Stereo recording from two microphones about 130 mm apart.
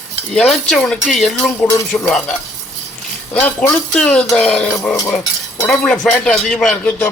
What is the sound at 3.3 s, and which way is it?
Speech, 10° left (ahead or behind).